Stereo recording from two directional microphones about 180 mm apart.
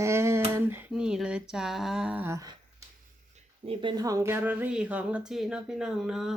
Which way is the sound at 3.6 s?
30° right (ahead or behind).